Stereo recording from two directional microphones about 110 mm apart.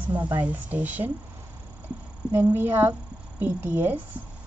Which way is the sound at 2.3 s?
20° right (ahead or behind).